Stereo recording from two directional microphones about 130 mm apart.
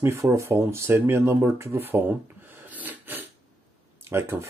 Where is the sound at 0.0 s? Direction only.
20° right (ahead or behind).